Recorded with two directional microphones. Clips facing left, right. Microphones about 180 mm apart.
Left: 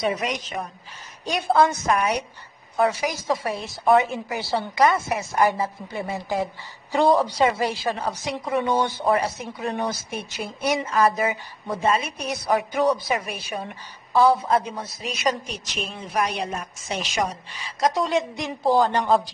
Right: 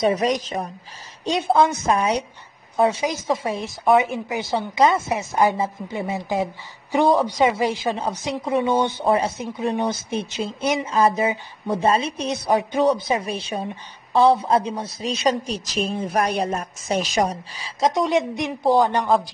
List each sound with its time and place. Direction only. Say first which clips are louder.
0.0 s a woman's voice: right 6 dB; 35° right (ahead or behind)
1.3 s a woman's voice: right 1 dB; 20° right (ahead or behind); by 17.6 s 35° right (ahead or behind)
17.7 s a woman's voice: right 2 dB; 20° right (ahead or behind)
18.6 s speech: right 2 dB; centre (ahead or behind)